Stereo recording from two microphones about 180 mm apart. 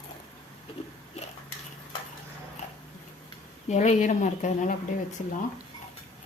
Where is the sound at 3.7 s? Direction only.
40° left (ahead or behind).